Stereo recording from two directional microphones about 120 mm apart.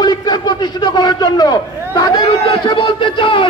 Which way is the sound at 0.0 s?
35° left (ahead or behind).